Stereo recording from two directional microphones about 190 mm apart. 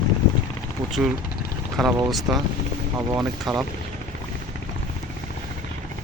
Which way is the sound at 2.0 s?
Centre (ahead or behind).